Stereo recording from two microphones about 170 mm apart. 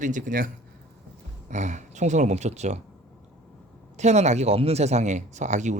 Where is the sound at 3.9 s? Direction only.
40° right (ahead or behind).